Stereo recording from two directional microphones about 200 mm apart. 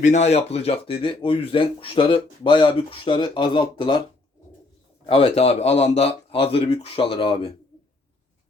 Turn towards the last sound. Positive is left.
turn(degrees=25)  # may be behind; listen again after turning